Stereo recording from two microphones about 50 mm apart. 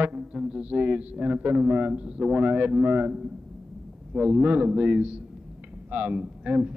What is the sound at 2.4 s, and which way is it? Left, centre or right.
Speech, right.